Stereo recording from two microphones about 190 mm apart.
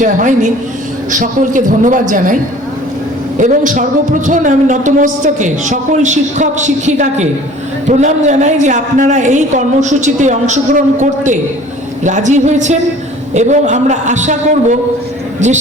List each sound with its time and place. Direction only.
0.0 s a man's voice: 40° right (ahead or behind)